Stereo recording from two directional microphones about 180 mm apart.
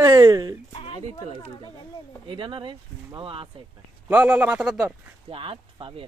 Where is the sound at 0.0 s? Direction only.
20° right (ahead or behind).